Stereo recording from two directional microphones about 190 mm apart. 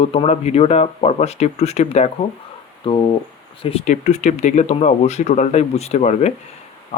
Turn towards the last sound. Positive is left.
turn(degrees=35)  # may be behind; listen again after turning